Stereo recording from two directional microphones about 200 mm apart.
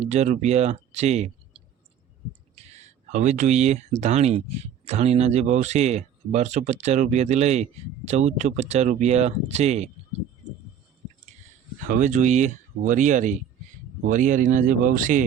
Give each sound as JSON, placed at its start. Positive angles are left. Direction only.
{"t": 0.0, "sound": "speech", "side_deg": -35}
{"t": 2.6, "sound": "speech", "side_deg": -35}
{"t": 11.9, "sound": "speech", "side_deg": -40}